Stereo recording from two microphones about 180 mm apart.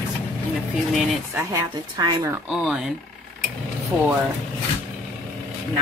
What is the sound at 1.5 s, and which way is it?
Speech, 20° right (ahead or behind).